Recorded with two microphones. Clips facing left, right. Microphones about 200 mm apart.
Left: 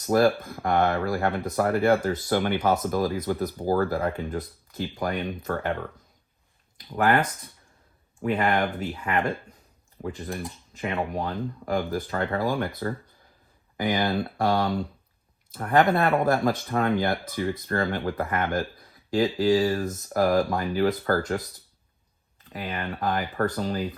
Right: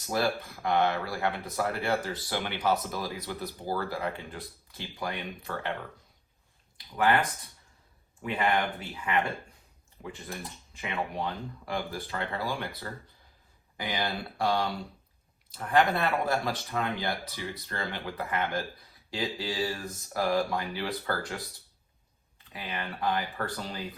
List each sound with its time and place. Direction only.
0.0 s speech: 50° left (ahead or behind)
6.7 s speech: 50° left (ahead or behind)
8.2 s speech: 45° left (ahead or behind)
22.5 s speech: 45° left (ahead or behind)